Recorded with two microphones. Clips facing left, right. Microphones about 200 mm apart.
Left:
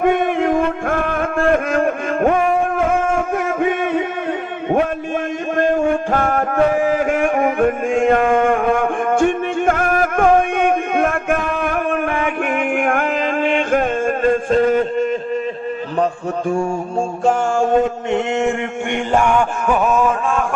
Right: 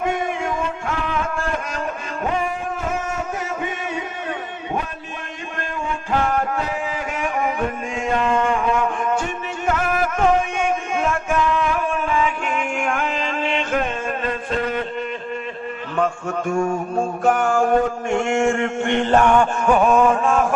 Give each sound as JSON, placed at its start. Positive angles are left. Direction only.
{"t": 0.0, "sound": "music", "side_deg": 55}
{"t": 5.5, "sound": "music", "side_deg": 50}
{"t": 16.5, "sound": "mantra", "side_deg": 30}
{"t": 17.2, "sound": "a sound", "side_deg": 25}